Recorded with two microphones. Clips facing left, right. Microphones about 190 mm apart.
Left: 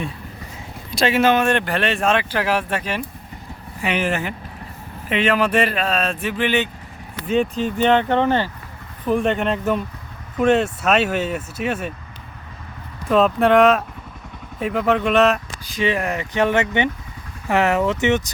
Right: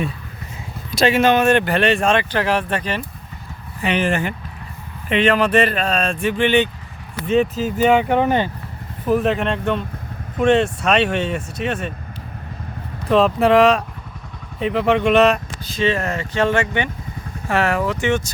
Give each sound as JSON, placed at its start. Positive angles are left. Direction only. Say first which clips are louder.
{"t": 0.9, "sound": "speech", "louder": "right 2 dB", "side_deg": 0}
{"t": 9.0, "sound": "speech", "louder": "right 1 dB", "side_deg": -5}
{"t": 13.1, "sound": "speech", "louder": "right 1 dB", "side_deg": 0}
{"t": 15.6, "sound": "speech", "louder": "right 1 dB", "side_deg": 15}